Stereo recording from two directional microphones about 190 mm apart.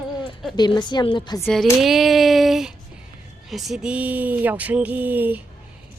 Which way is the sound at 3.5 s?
Centre (ahead or behind).